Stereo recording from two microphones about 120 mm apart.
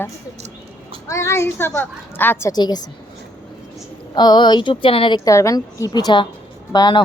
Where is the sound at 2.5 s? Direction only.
35° left (ahead or behind).